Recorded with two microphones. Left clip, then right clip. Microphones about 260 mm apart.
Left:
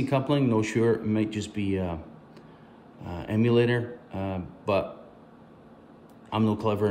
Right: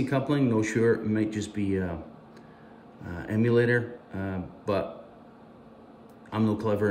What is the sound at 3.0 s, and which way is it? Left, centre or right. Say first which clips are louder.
Speech: left 1 dB; centre.